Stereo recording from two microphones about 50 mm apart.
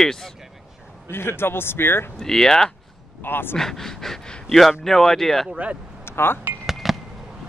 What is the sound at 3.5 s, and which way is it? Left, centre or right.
Speech, centre.